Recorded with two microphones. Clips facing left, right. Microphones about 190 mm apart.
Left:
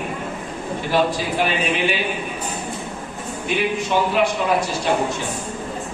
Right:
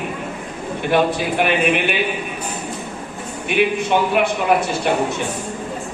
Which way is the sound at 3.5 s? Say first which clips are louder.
Right 5 dB; 60° right (ahead or behind).